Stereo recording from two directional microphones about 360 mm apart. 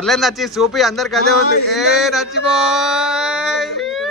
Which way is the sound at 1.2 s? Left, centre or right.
Left.